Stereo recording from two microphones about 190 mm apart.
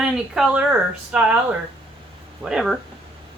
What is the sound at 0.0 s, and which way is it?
Speech, 5° right (ahead or behind).